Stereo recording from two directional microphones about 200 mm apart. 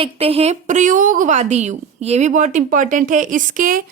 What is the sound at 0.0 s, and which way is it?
Speech, 30° right (ahead or behind).